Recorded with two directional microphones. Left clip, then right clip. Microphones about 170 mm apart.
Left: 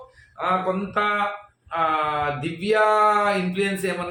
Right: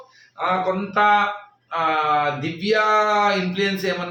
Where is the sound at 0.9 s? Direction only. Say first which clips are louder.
Right 7 dB; 5° left (ahead or behind).